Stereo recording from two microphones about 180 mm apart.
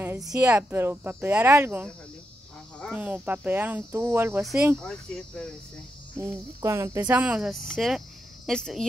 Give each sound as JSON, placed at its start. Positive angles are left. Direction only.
{"t": 0.0, "sound": "a sound", "side_deg": -15}
{"t": 0.5, "sound": "speech", "side_deg": -10}
{"t": 2.9, "sound": "speech", "side_deg": -10}
{"t": 4.7, "sound": "speech", "side_deg": 5}
{"t": 6.6, "sound": "speech", "side_deg": -15}